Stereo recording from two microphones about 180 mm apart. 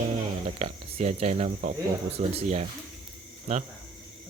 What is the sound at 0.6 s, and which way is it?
Speech, 35° right (ahead or behind).